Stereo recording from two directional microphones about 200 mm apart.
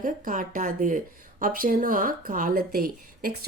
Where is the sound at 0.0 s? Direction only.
40° right (ahead or behind).